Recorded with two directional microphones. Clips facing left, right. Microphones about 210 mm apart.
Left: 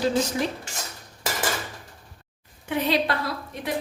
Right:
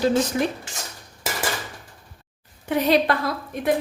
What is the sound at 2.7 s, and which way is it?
Speech, 45° right (ahead or behind).